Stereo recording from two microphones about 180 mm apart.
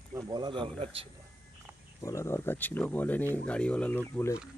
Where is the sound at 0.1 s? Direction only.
20° right (ahead or behind).